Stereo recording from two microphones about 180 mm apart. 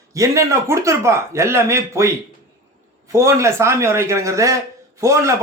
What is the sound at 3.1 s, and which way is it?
A man's voice, 15° right (ahead or behind).